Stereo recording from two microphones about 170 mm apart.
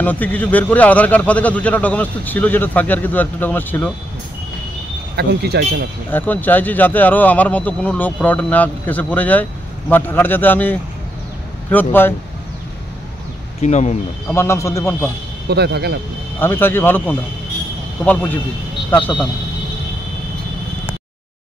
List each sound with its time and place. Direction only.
0.0 s speech: 10° left (ahead or behind)
5.1 s speech: 70° right (ahead or behind)
6.1 s speech: 10° left (ahead or behind)
13.6 s speech: 40° left (ahead or behind)
14.3 s speech: 15° left (ahead or behind)
15.4 s speech: 70° right (ahead or behind)
16.3 s speech: 10° left (ahead or behind)